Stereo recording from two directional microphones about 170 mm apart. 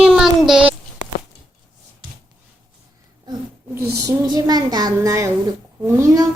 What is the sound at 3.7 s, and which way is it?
A child's voice, 20° right (ahead or behind).